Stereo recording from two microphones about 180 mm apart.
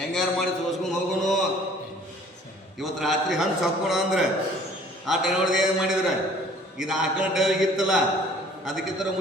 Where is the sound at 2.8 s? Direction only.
Centre (ahead or behind).